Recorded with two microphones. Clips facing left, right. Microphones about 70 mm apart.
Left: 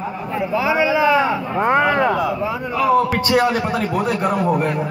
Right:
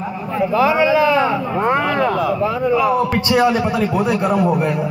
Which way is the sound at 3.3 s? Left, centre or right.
Left.